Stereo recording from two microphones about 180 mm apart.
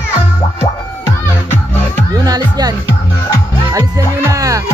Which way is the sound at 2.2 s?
20° right (ahead or behind).